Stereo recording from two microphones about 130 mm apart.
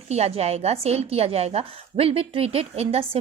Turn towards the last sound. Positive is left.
turn(degrees=-50)  # may be behind; listen again after turning